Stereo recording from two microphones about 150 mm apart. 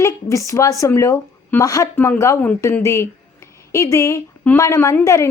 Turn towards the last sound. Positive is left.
turn(degrees=20)  # may be behind; listen again after turning